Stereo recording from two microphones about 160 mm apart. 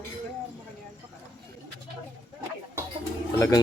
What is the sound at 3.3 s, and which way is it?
Speech, 20° left (ahead or behind).